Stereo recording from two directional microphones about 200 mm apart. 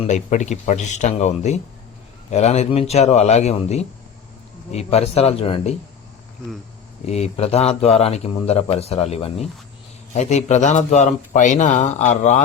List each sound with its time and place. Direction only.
0.0 s speech: 35° left (ahead or behind)
7.0 s speech: 30° left (ahead or behind)